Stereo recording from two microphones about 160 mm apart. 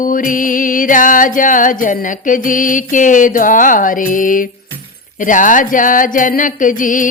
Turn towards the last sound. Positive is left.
turn(degrees=55)  # may be behind; listen again after turning